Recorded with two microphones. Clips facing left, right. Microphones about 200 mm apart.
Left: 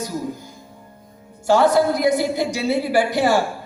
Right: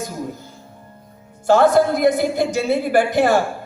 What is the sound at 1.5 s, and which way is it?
A man's voice, 50° right (ahead or behind).